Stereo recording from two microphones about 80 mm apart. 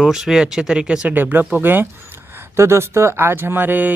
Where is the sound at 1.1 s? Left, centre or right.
Right.